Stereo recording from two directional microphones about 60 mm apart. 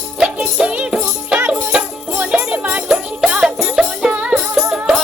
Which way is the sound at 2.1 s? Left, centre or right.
Right.